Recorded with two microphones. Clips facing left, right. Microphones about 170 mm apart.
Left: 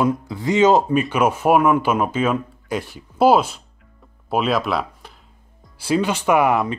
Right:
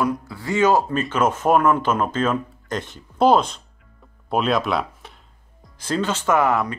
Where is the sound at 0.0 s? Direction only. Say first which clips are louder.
Left 4 dB; 20° left (ahead or behind); by 5.1 s centre (ahead or behind).